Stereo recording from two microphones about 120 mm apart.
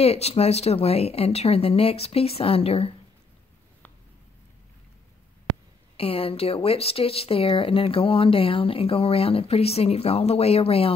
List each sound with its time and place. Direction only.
0.0 s speech: 60° left (ahead or behind)
5.9 s speech: 50° left (ahead or behind)